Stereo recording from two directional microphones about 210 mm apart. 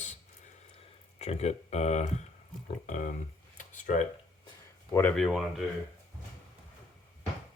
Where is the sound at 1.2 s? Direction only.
30° left (ahead or behind).